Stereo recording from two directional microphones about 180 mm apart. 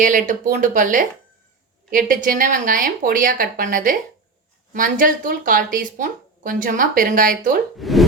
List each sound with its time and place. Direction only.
0.0 s speech: 50° right (ahead or behind)
7.8 s speech: centre (ahead or behind)